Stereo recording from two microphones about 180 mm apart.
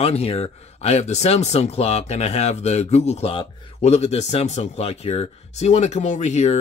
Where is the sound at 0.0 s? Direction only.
35° left (ahead or behind).